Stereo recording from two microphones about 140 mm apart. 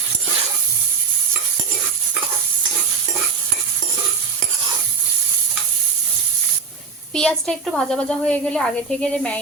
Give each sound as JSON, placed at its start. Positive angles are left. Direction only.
{"t": 7.1, "sound": "a woman's voice", "side_deg": 5}